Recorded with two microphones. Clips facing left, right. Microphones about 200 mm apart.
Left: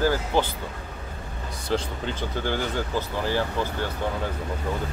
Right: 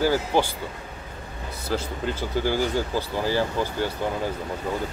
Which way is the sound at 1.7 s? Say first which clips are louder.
Even; 10° right (ahead or behind).